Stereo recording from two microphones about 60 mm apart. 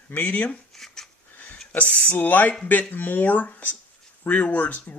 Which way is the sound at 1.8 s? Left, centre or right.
Left.